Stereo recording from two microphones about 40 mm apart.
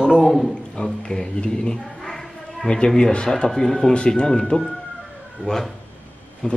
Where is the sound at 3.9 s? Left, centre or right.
Left.